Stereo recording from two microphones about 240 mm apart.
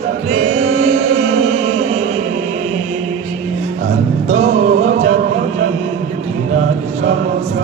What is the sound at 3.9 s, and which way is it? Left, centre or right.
Music, right.